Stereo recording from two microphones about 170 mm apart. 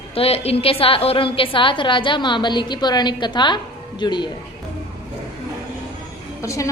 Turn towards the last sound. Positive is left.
turn(degrees=20)  # may be behind; listen again after turning